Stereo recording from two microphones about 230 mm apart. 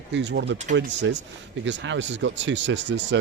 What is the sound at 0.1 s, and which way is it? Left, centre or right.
Speech, right.